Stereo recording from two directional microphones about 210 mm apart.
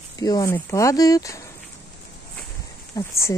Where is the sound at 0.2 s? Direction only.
15° left (ahead or behind).